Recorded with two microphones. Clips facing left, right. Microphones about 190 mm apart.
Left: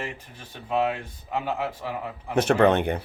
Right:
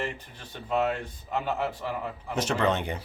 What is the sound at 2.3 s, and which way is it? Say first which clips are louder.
Speech: left 7 dB; 60° left (ahead or behind).